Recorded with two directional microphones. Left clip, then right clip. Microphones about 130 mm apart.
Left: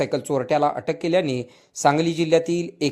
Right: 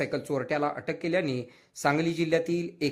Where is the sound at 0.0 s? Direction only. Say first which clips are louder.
Left 7 dB; 30° left (ahead or behind).